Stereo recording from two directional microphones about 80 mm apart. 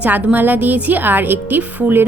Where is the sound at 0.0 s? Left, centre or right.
Centre.